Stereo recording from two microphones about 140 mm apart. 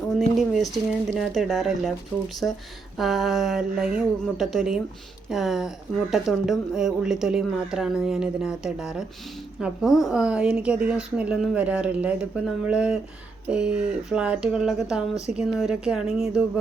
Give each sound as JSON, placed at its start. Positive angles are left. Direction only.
{"t": 0.2, "sound": "speech", "side_deg": 0}
{"t": 2.1, "sound": "speech", "side_deg": 15}
{"t": 3.0, "sound": "a woman's voice", "side_deg": 0}